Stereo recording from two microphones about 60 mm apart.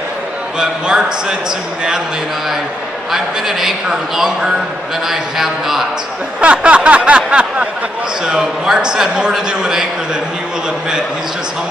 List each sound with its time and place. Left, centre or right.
0.6 s a man's voice: centre
3.1 s a man's voice: centre
6.4 s a sound: centre
8.3 s a man's voice: centre